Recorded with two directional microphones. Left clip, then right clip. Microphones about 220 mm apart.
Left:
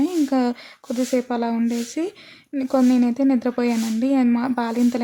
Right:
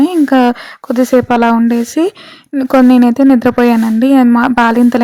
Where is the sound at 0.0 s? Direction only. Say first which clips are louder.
Right 11 dB; 30° right (ahead or behind).